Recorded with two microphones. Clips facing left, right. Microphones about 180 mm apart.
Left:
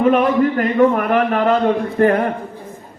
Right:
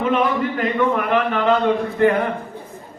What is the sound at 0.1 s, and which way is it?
A man's voice, 45° left (ahead or behind).